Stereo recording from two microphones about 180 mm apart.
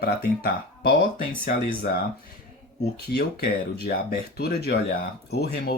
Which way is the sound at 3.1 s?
60° left (ahead or behind).